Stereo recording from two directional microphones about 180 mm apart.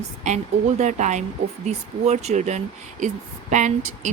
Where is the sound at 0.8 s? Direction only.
40° right (ahead or behind).